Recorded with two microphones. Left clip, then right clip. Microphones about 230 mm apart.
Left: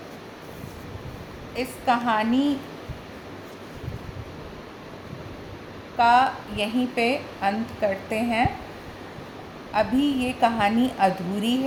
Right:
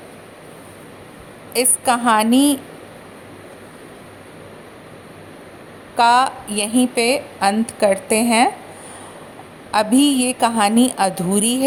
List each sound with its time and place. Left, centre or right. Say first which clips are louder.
1.5 s a woman's voice: right 6 dB; right
6.0 s a woman's voice: right 4 dB; right
9.7 s a woman's voice: right 7 dB; right